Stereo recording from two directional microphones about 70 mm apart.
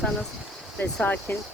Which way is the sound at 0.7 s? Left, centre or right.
Left.